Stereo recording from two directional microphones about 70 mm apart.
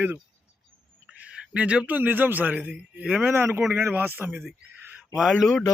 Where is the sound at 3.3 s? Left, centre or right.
Right.